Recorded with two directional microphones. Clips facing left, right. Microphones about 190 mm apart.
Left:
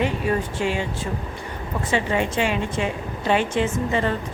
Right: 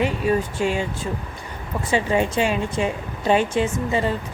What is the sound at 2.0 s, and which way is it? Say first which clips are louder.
A woman's voice: right 2 dB; 30° right (ahead or behind).